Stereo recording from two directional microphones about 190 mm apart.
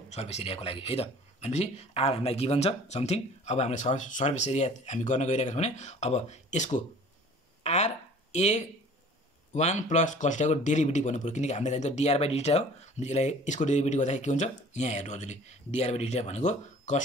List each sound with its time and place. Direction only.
0.1 s speech: 35° left (ahead or behind)